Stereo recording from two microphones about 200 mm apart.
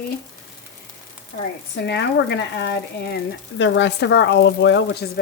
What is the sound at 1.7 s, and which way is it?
Speech, 60° left (ahead or behind).